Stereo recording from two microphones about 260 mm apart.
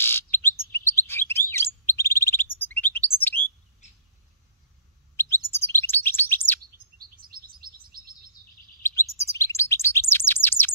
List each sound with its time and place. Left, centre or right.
0.0 s chirp: centre
3.8 s a sound: left
5.1 s chirp: centre
6.6 s chirp: right
9.3 s chirp: centre